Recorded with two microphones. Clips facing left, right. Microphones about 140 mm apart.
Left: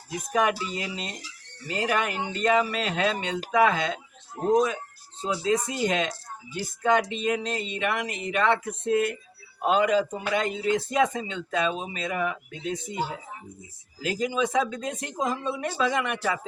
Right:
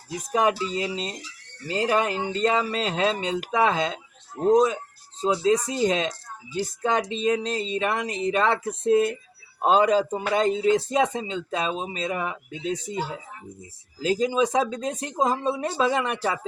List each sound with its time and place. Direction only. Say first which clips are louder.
0.3 s speech: right 3 dB; 30° right (ahead or behind)
5.3 s speech: right 3 dB; 30° right (ahead or behind)
14.0 s speech: right 4 dB; 30° right (ahead or behind)